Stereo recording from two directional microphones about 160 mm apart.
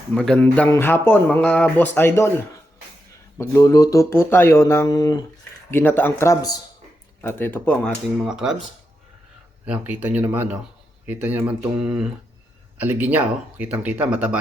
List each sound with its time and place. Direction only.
0.1 s speech: 5° left (ahead or behind)
3.3 s speech: 20° left (ahead or behind)
5.7 s speech: 15° left (ahead or behind)
8.2 s speech: 5° right (ahead or behind)
9.6 s speech: 10° right (ahead or behind)